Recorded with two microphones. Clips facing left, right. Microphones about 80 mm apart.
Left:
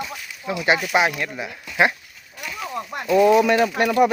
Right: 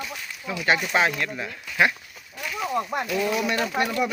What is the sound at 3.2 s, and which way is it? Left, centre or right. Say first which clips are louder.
Speech: left 11 dB; left.